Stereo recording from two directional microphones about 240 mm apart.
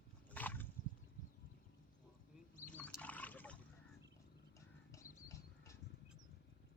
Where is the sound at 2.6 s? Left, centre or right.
Centre.